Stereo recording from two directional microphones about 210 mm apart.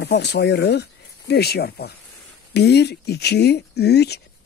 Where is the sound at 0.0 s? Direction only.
55° left (ahead or behind).